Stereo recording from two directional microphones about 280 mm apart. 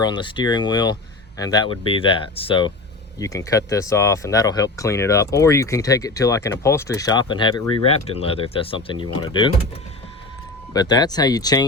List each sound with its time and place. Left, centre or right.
0.0 s speech: centre
10.8 s speech: centre